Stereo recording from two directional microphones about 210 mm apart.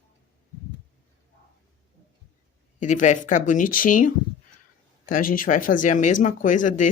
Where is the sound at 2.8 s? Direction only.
35° left (ahead or behind).